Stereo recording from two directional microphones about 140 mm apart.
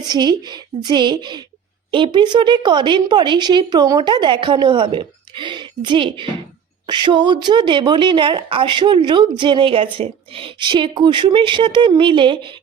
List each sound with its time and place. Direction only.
0.1 s a woman's voice: 30° right (ahead or behind)